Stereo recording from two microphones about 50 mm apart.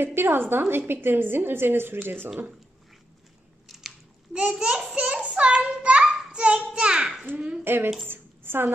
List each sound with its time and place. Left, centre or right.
0.0 s a woman's voice: right
3.6 s biting: centre
4.3 s a child's voice: centre
4.9 s a child's voice: right
7.6 s a woman's voice: right
8.1 s a sound: right